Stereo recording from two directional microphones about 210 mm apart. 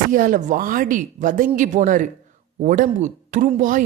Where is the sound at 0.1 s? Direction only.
40° right (ahead or behind).